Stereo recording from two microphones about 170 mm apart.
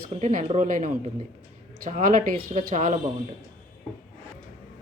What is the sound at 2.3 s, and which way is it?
Speech, 40° right (ahead or behind).